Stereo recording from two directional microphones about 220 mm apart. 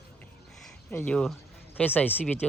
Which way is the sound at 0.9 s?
5° left (ahead or behind).